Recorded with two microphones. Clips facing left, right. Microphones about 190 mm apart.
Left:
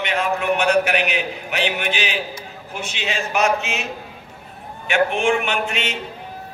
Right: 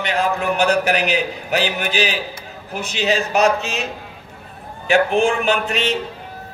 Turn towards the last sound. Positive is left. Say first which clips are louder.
# right 5 dB
turn(degrees=-35)  # may be behind; listen again after turning